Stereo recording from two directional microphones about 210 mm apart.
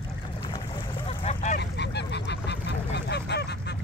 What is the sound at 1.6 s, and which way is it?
Goose, 55° left (ahead or behind).